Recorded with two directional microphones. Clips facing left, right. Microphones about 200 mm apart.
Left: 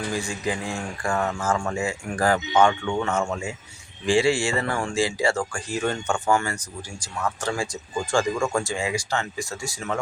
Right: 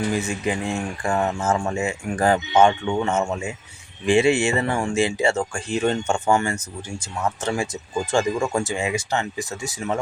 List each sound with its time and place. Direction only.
0.1 s speech: 20° right (ahead or behind)